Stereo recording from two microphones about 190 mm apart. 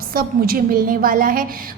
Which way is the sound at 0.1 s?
50° right (ahead or behind).